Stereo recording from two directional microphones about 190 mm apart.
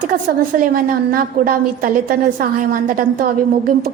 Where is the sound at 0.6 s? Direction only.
50° right (ahead or behind).